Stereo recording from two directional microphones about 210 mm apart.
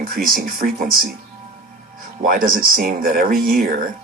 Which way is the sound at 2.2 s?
45° right (ahead or behind).